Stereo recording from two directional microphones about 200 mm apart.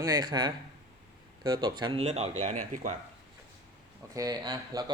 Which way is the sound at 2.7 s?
40° right (ahead or behind).